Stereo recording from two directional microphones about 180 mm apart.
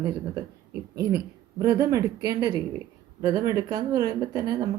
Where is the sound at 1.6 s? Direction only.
20° right (ahead or behind).